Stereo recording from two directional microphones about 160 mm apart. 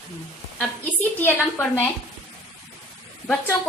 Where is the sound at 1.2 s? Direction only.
15° left (ahead or behind).